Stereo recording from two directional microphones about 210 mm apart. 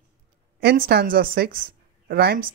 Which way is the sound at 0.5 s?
45° right (ahead or behind).